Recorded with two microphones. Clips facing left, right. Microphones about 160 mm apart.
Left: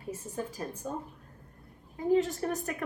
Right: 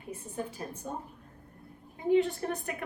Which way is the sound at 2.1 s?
40° left (ahead or behind).